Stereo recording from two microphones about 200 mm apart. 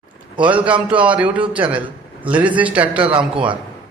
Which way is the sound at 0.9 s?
5° right (ahead or behind).